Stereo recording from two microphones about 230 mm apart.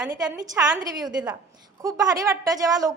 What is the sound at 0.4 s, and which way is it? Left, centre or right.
A woman's voice, centre.